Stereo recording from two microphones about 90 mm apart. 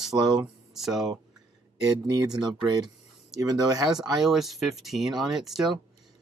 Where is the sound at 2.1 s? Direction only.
50° right (ahead or behind).